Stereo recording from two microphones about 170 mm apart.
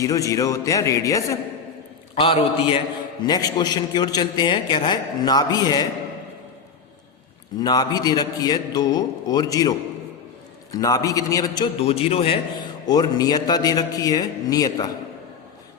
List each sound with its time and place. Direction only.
0.0 s a man's voice: 20° left (ahead or behind)
2.1 s a man's voice: 35° left (ahead or behind)
7.6 s a man's voice: 25° left (ahead or behind)
11.8 s a man's voice: 35° left (ahead or behind)
12.9 s a man's voice: 25° left (ahead or behind)